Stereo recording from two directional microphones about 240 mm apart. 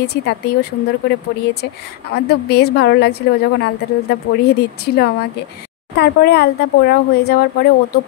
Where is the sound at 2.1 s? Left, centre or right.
Left.